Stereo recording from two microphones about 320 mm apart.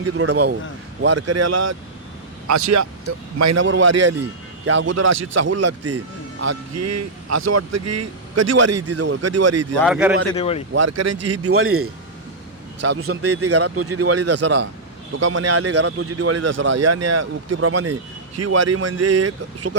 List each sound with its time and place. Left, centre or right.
0.0 s speech: right
5.2 s speech: right
9.8 s speech: centre
10.3 s speech: centre
10.8 s speech: right